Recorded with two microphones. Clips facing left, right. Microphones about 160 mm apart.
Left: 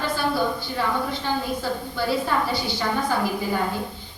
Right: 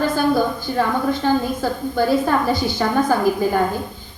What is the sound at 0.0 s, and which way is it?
A woman's voice, 45° right (ahead or behind).